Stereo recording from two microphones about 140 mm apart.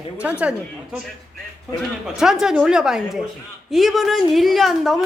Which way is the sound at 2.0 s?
5° right (ahead or behind).